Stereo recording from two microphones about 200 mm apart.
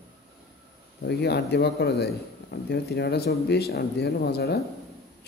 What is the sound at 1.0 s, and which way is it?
A man's voice, 55° left (ahead or behind).